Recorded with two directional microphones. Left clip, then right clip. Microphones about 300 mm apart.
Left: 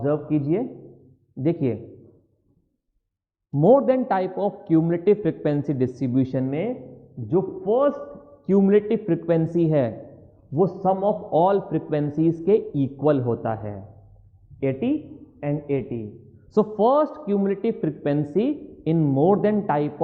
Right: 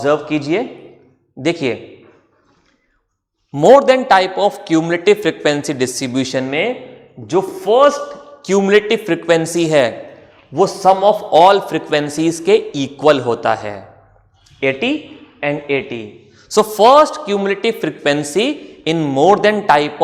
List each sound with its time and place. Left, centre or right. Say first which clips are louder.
0.0 s a man's voice: right 8 dB; centre
3.5 s a man's voice: right 9 dB; right
3.8 s a man's voice: right 10 dB; centre